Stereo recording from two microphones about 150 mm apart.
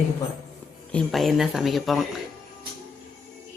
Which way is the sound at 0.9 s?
Centre (ahead or behind).